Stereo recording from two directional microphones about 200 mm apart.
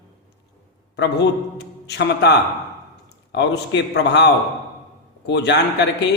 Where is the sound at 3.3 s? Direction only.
60° left (ahead or behind).